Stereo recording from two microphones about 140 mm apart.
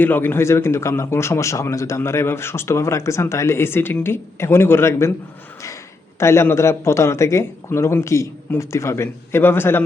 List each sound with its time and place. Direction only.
0.0 s a man's voice: 15° left (ahead or behind)
6.1 s a man's voice: 20° left (ahead or behind)